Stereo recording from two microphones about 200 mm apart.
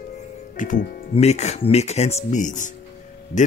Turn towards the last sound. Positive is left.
turn(degrees=40)  # may be behind; listen again after turning